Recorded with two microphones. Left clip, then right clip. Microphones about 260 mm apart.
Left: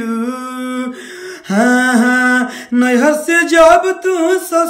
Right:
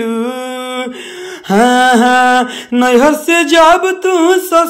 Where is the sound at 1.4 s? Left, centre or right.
Centre.